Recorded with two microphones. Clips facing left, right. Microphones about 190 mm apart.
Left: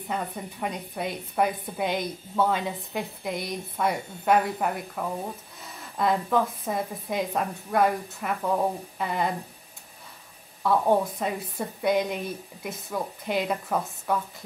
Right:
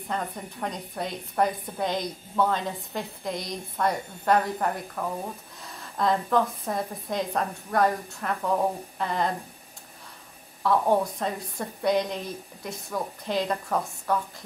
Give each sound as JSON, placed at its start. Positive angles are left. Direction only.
{"t": 0.1, "sound": "a woman's voice", "side_deg": 5}
{"t": 10.6, "sound": "a woman's voice", "side_deg": 5}